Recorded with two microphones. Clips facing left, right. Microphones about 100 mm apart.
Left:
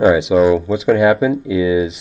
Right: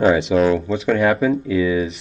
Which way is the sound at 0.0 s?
5° left (ahead or behind).